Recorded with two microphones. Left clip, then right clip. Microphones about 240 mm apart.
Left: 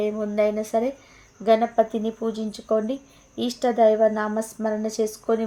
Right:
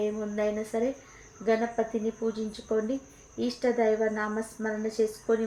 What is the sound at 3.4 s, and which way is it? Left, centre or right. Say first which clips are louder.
A woman's voice: left 7 dB; left.